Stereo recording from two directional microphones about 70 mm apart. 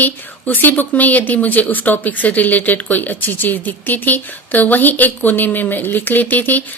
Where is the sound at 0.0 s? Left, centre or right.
Left.